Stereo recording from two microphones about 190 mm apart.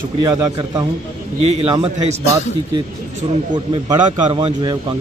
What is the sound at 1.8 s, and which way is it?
Speech, 35° right (ahead or behind).